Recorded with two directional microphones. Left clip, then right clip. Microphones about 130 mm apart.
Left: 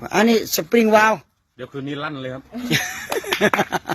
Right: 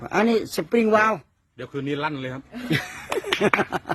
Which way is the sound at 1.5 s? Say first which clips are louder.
Right 1 dB; 45° right (ahead or behind).